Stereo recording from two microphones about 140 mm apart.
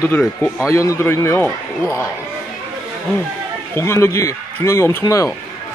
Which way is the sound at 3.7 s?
20° left (ahead or behind).